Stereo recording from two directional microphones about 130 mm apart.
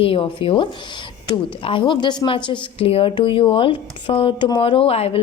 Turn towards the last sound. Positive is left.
turn(degrees=50)  # may be behind; listen again after turning